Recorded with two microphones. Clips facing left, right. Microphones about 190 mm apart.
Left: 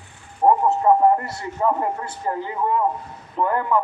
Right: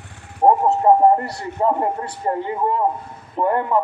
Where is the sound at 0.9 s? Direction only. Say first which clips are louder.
Right 3 dB; 25° right (ahead or behind).